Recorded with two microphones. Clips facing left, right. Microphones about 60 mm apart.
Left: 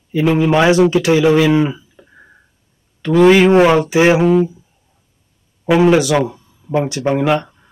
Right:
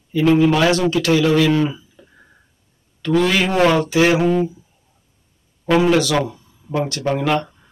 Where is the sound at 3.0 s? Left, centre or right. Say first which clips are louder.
Left 8 dB; left.